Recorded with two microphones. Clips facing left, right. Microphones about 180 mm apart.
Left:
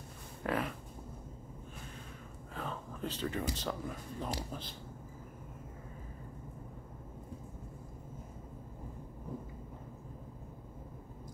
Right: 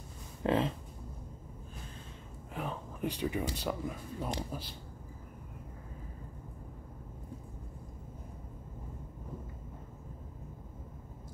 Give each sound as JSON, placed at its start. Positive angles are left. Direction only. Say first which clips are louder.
{"t": 0.4, "sound": "speech", "louder": "right 5 dB", "side_deg": -25}
{"t": 2.5, "sound": "speech", "louder": "right 3 dB", "side_deg": -15}